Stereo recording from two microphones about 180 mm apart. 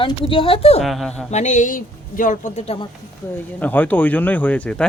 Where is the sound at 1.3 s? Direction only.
40° left (ahead or behind).